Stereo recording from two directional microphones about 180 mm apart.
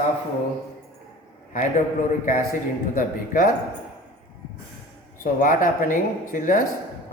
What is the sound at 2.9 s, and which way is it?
Speech, 50° left (ahead or behind).